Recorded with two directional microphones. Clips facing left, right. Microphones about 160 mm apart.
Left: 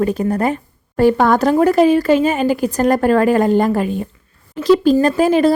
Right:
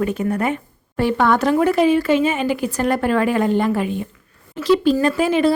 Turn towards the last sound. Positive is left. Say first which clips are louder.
# left 4 dB
turn(degrees=40)  # may be behind; listen again after turning